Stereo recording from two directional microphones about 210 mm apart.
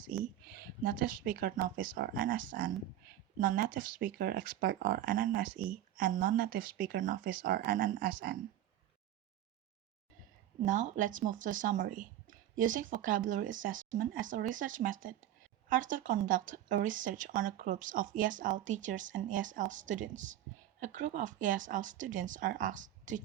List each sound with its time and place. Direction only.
0.1 s speech: 40° right (ahead or behind)
10.7 s speech: 35° right (ahead or behind)